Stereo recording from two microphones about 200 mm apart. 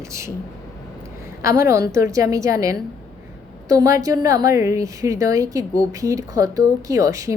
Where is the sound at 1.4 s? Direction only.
15° right (ahead or behind).